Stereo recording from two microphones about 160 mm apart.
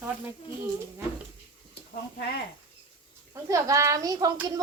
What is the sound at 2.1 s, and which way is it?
Speech, 90° left.